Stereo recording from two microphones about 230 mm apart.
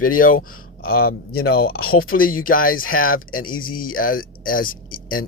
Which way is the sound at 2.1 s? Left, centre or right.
Left.